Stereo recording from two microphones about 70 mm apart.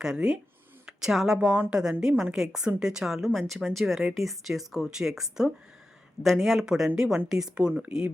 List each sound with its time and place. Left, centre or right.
0.0 s a woman's voice: centre
1.4 s a woman's voice: centre
7.7 s speech: right